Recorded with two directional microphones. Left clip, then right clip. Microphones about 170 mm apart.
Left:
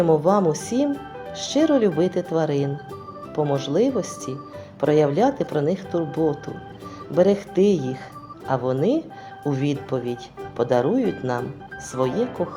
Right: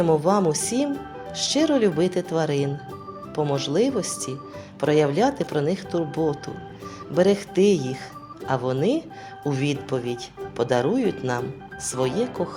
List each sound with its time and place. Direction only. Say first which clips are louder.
0.0 s speech: left 2 dB; 35° right (ahead or behind)